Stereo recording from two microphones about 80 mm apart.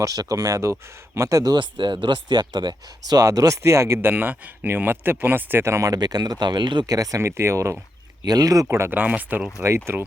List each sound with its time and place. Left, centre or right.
0.0 s speech: right
1.5 s speech: right
6.8 s speech: right
8.2 s speech: right
8.9 s speech: right
9.6 s speech: right